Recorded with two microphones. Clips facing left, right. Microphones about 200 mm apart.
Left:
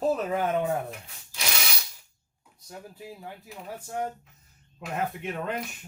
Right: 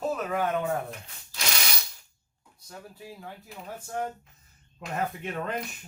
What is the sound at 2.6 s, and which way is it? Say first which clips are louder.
Speech: left 2 dB; 20° left (ahead or behind).